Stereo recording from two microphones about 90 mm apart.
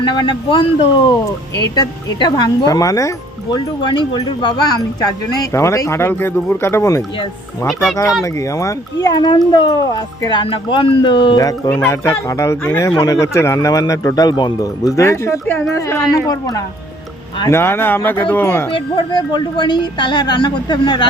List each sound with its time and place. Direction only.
0.0 s a woman's voice: 60° left (ahead or behind)
1.2 s speech: 45° left (ahead or behind)
2.3 s speech: 45° left (ahead or behind)
3.5 s speech: 60° left (ahead or behind); by 7.0 s 30° left (ahead or behind)
8.2 s speech: 35° left (ahead or behind); by 10.4 s 50° left (ahead or behind)
10.4 s speech: 75° left (ahead or behind)
11.3 s speech: 45° left (ahead or behind)
11.9 s speech: 35° left (ahead or behind)
17.5 s speech: 25° left (ahead or behind)
18.7 s a woman's voice: 55° left (ahead or behind)